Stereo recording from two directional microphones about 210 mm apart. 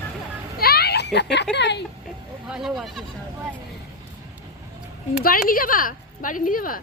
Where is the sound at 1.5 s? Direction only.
55° left (ahead or behind).